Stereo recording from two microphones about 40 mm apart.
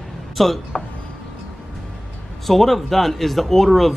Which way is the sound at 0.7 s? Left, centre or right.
Left.